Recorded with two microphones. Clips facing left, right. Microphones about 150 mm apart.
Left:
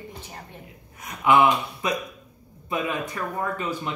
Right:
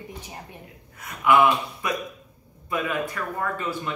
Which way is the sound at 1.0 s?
20° left (ahead or behind).